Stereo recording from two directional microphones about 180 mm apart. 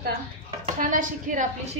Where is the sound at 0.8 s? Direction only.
50° right (ahead or behind).